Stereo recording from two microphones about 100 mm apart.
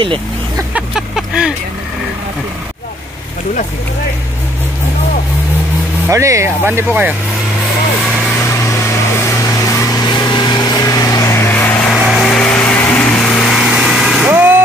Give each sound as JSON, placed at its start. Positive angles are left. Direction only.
{"t": 0.7, "sound": "vehicle", "side_deg": -5}
{"t": 6.0, "sound": "speech", "side_deg": -30}
{"t": 8.4, "sound": "vehicle", "side_deg": 30}
{"t": 11.9, "sound": "vehicle", "side_deg": 0}
{"t": 13.2, "sound": "vehicle", "side_deg": 5}
{"t": 14.3, "sound": "vehicle", "side_deg": -20}